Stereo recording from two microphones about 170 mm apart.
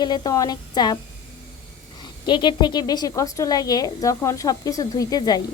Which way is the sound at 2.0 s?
25° left (ahead or behind).